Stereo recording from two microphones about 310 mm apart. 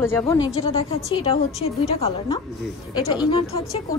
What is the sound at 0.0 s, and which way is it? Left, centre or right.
Speech, centre.